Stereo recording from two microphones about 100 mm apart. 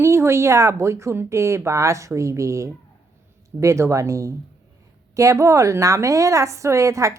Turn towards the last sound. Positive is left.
turn(degrees=-30)  # may be behind; listen again after turning